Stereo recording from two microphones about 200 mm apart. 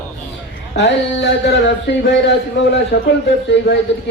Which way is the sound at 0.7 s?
60° left (ahead or behind).